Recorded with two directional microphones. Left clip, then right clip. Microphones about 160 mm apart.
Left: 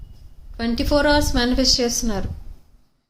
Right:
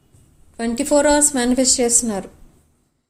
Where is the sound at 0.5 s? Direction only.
15° right (ahead or behind).